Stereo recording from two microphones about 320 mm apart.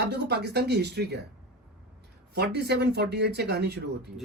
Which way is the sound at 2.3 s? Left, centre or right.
Right.